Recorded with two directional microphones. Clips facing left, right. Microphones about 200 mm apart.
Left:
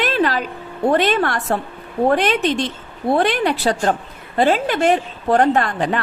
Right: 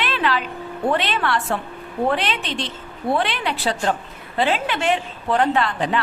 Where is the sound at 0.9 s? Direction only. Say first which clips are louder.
Left 6 dB; 45° left (ahead or behind).